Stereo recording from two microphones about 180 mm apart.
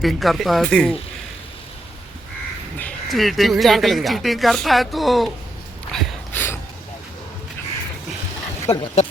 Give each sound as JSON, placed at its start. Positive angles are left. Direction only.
{"t": 0.0, "sound": "speech", "side_deg": 0}
{"t": 2.7, "sound": "speech", "side_deg": 5}
{"t": 5.9, "sound": "a sound", "side_deg": 5}
{"t": 8.6, "sound": "speech", "side_deg": 25}